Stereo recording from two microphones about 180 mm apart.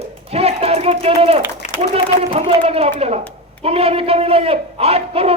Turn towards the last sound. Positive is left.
turn(degrees=-35)  # may be behind; listen again after turning